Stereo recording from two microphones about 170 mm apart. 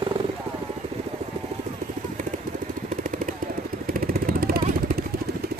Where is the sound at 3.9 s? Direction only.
60° right (ahead or behind).